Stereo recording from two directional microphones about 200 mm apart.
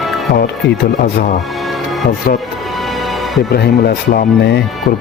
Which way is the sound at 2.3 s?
45° left (ahead or behind).